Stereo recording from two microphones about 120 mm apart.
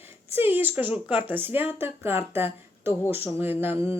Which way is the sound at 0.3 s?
15° right (ahead or behind).